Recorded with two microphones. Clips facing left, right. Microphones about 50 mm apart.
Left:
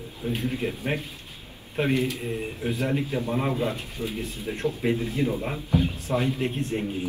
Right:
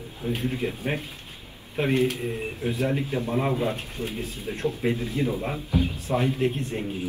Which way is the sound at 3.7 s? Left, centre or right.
Right.